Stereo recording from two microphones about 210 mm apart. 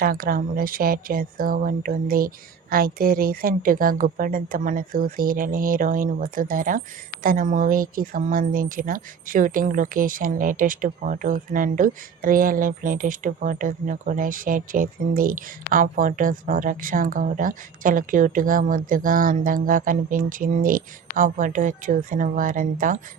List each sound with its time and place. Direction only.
0.0 s speech: 45° right (ahead or behind)